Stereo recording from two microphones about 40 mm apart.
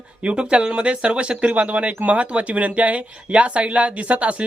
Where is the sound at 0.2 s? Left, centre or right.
Right.